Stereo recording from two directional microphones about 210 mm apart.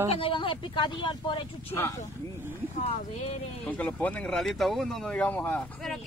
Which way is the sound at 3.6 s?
5° left (ahead or behind).